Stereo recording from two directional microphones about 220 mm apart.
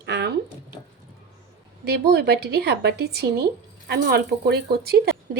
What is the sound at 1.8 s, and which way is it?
Speech, 45° right (ahead or behind).